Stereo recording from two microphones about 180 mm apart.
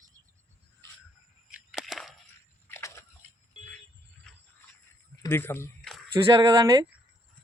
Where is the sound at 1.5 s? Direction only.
Centre (ahead or behind).